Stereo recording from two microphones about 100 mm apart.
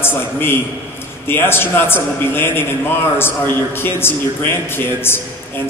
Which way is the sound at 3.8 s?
20° left (ahead or behind).